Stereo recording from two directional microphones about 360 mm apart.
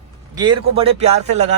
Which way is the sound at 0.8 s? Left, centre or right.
Centre.